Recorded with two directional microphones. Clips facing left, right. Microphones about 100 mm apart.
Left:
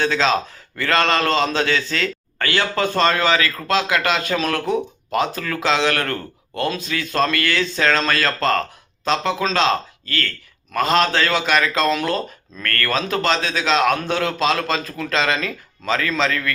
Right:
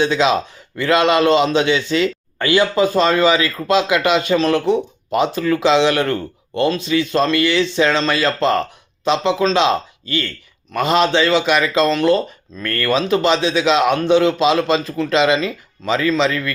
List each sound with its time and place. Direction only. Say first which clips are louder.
0.0 s a man's voice: right 3 dB; 10° right (ahead or behind)
9.6 s a man's voice: right 2 dB; 15° right (ahead or behind)
12.6 s speech: right 2 dB; 15° right (ahead or behind)
12.9 s a man's voice: right 5 dB; 5° right (ahead or behind)